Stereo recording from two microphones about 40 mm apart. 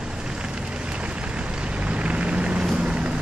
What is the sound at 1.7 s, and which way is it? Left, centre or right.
Vehicle, right.